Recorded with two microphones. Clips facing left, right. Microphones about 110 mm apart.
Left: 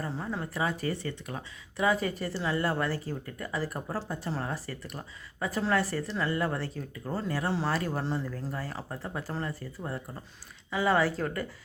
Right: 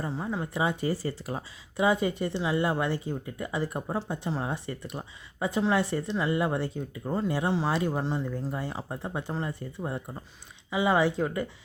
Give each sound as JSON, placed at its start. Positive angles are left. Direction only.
{"t": 0.0, "sound": "speech", "side_deg": -15}